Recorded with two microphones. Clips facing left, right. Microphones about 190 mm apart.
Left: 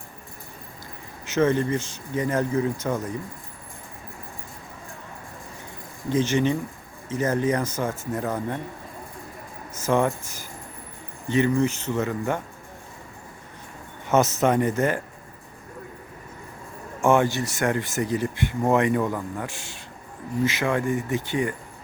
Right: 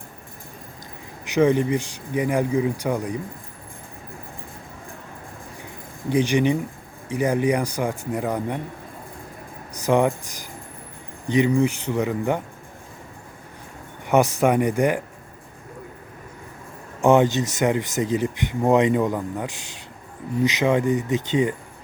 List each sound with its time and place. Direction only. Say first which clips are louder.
1.2 s speech: right 3 dB; 15° right (ahead or behind)
6.1 s speech: right 2 dB; 15° right (ahead or behind)
9.7 s speech: right 3 dB; 15° right (ahead or behind)
14.1 s speech: right 2 dB; 15° right (ahead or behind)
17.0 s speech: right 3 dB; 20° right (ahead or behind)